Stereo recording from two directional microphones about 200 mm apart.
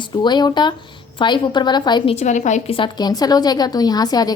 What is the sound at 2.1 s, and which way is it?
A woman's voice, 35° left (ahead or behind).